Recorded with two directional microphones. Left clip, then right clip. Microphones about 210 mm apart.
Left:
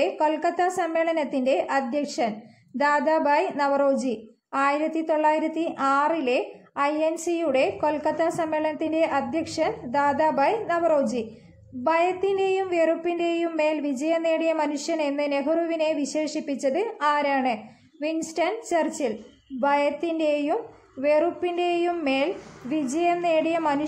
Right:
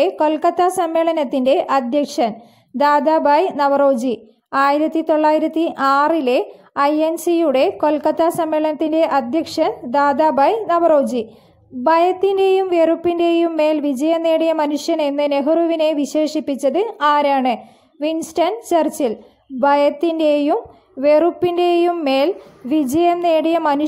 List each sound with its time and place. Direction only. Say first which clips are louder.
0.0 s a woman's voice: right 7 dB; 35° right (ahead or behind)